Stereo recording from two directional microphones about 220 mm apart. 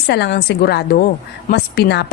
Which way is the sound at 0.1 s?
50° left (ahead or behind).